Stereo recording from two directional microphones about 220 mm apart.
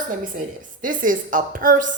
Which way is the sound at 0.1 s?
35° right (ahead or behind).